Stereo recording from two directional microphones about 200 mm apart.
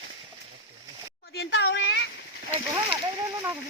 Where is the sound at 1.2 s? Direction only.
55° left (ahead or behind).